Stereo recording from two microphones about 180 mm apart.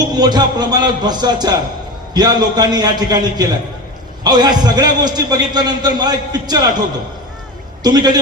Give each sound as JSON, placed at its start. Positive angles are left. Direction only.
{"t": 0.1, "sound": "a man's voice", "side_deg": -25}
{"t": 7.9, "sound": "a man's voice", "side_deg": -25}